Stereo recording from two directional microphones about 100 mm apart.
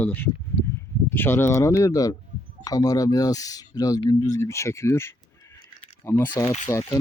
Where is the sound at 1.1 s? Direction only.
25° left (ahead or behind).